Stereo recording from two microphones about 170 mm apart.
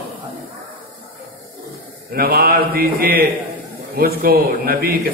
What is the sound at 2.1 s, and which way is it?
Speech, 60° right (ahead or behind).